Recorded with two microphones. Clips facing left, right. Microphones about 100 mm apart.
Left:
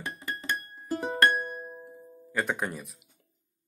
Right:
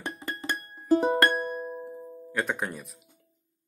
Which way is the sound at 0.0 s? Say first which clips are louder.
Right 1 dB; 30° right (ahead or behind).